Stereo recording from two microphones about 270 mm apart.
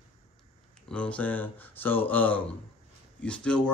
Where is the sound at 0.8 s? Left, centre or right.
Centre.